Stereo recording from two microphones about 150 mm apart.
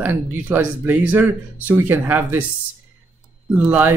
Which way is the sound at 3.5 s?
10° right (ahead or behind).